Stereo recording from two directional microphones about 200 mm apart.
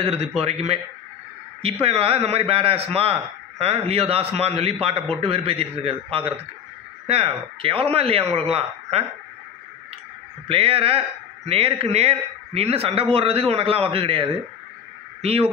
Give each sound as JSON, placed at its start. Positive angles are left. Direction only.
{"t": 0.0, "sound": "a man's voice", "side_deg": -30}
{"t": 10.5, "sound": "a man's voice", "side_deg": -30}